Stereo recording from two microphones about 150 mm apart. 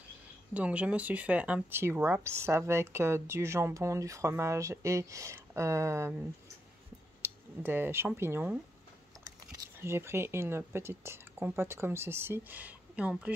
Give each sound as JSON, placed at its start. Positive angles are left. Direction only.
{"t": 0.5, "sound": "speech", "side_deg": -10}
{"t": 7.2, "sound": "a sound", "side_deg": -15}
{"t": 8.2, "sound": "speech", "side_deg": -15}
{"t": 9.8, "sound": "speech", "side_deg": -15}